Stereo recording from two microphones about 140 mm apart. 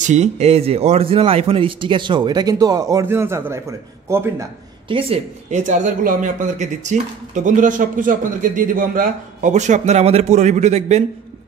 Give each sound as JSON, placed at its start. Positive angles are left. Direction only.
{"t": 0.0, "sound": "a man's voice", "side_deg": -55}
{"t": 4.8, "sound": "a woman's voice", "side_deg": -40}
{"t": 5.5, "sound": "speech", "side_deg": -60}